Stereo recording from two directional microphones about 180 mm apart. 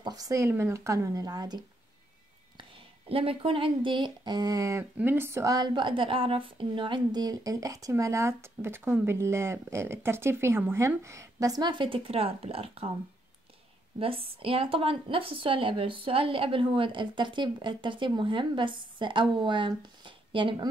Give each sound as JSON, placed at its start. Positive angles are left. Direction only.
{"t": 0.0, "sound": "speech", "side_deg": -20}
{"t": 3.1, "sound": "speech", "side_deg": -30}
{"t": 13.9, "sound": "speech", "side_deg": -30}